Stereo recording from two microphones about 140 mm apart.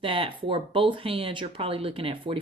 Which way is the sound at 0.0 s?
40° right (ahead or behind).